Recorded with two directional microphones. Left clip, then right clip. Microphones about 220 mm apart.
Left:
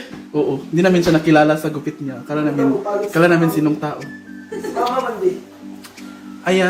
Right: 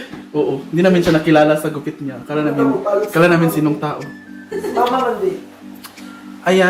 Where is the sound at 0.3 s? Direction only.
20° left (ahead or behind).